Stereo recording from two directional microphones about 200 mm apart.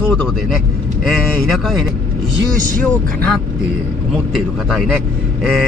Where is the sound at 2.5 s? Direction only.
45° right (ahead or behind).